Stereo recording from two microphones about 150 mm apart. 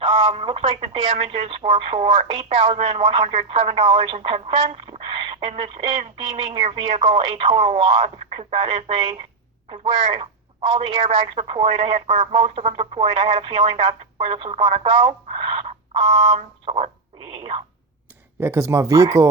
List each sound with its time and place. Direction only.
0.0 s speech: 40° right (ahead or behind)
18.3 s speech: 15° right (ahead or behind)